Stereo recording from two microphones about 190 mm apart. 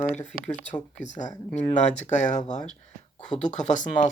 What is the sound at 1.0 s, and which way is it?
Speech, 40° left (ahead or behind).